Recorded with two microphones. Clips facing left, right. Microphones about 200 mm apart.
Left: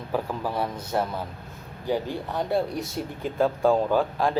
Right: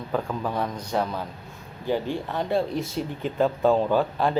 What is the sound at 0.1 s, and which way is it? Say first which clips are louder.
A man's voice: even; 10° left (ahead or behind).